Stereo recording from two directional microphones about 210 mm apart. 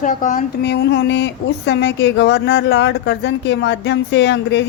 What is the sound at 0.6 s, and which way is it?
A woman's voice, 50° left (ahead or behind).